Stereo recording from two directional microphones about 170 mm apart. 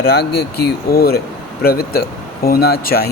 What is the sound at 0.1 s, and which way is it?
Speech, 70° left (ahead or behind).